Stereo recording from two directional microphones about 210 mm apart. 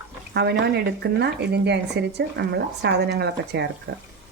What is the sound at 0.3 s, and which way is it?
Speech, 50° right (ahead or behind).